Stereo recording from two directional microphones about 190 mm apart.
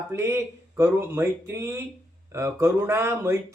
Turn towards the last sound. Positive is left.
turn(degrees=-15)  # may be behind; listen again after turning